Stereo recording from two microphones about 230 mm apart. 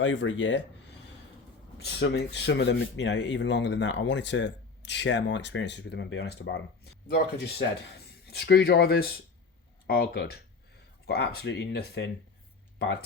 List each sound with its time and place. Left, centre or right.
0.0 s speech: left
1.8 s speech: left